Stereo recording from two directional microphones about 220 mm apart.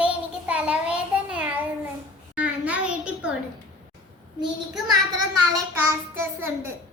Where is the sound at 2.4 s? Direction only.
5° right (ahead or behind).